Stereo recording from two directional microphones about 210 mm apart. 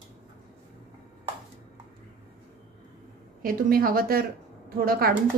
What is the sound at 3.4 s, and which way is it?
A woman's voice, 45° right (ahead or behind).